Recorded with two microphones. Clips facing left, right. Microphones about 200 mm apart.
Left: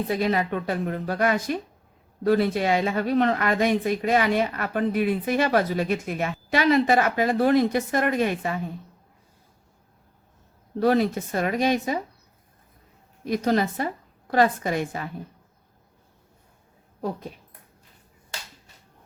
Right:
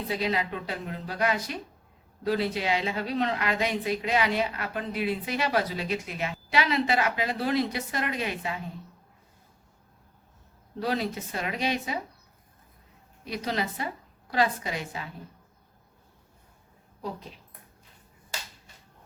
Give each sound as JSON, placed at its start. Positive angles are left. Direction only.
{"t": 0.1, "sound": "speech", "side_deg": 50}
{"t": 10.8, "sound": "speech", "side_deg": 50}
{"t": 13.2, "sound": "speech", "side_deg": 50}